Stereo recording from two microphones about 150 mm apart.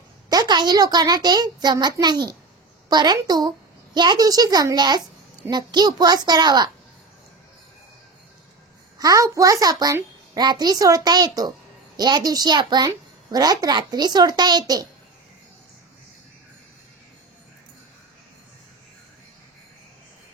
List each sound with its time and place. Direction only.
0.3 s a child's voice: 30° right (ahead or behind)
8.9 s a child's voice: 20° right (ahead or behind)